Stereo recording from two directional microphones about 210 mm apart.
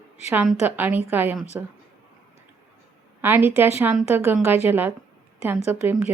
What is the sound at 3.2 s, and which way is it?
A woman's voice, 10° right (ahead or behind).